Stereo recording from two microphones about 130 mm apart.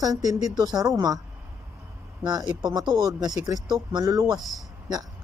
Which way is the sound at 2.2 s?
30° right (ahead or behind).